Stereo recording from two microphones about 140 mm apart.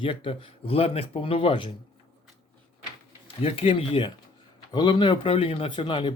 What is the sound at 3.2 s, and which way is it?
A man's voice, 40° left (ahead or behind).